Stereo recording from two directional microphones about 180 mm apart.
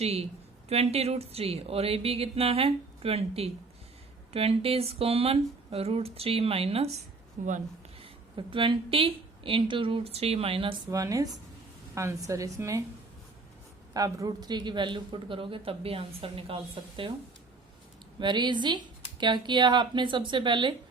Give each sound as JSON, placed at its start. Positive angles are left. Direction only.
{"t": 0.0, "sound": "speech", "side_deg": -35}
{"t": 7.4, "sound": "speech", "side_deg": -45}
{"t": 8.0, "sound": "a woman's voice", "side_deg": -30}
{"t": 10.9, "sound": "a man's voice", "side_deg": -20}
{"t": 13.9, "sound": "a man's voice", "side_deg": -20}
{"t": 18.2, "sound": "a man's voice", "side_deg": -25}